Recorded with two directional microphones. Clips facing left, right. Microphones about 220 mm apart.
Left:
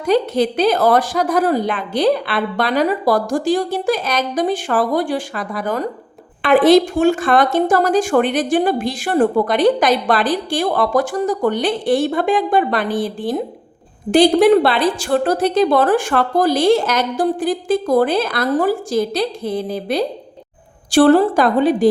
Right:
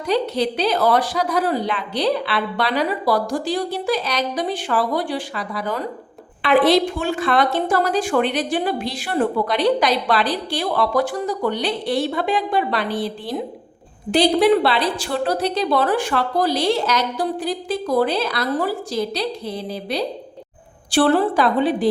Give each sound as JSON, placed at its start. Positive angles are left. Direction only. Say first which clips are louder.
{"t": 0.0, "sound": "a woman's voice", "louder": "left 4 dB", "side_deg": 50}